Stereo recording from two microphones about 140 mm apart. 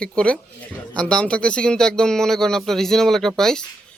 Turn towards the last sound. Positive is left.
turn(degrees=5)  # may be behind; listen again after turning